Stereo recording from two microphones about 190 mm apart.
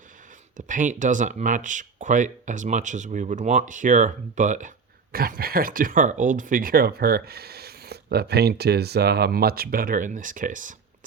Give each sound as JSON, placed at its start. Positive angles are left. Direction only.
{"t": 0.5, "sound": "speech", "side_deg": -40}